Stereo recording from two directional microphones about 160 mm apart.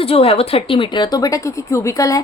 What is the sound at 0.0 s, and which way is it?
A woman's voice, 35° left (ahead or behind).